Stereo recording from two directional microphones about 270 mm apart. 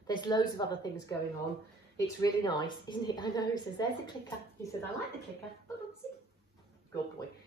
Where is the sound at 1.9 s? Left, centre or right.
Centre.